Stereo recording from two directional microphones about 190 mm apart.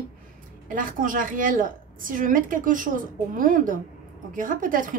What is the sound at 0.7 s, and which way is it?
A woman's voice, 45° right (ahead or behind).